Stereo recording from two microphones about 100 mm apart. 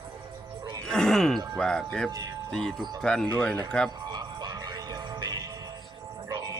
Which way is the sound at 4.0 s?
45° right (ahead or behind).